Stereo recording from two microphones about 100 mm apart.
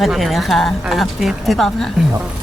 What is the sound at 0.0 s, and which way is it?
A woman's voice, centre (ahead or behind).